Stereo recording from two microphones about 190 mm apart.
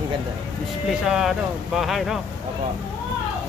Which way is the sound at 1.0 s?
5° right (ahead or behind).